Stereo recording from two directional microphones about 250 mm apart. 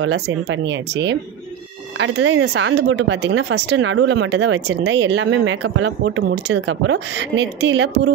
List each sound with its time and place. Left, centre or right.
0.0 s speech: right